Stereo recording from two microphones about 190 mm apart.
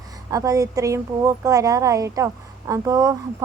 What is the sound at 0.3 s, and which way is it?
A woman's voice, 20° right (ahead or behind).